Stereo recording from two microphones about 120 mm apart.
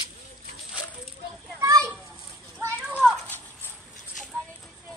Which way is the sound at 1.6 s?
25° right (ahead or behind).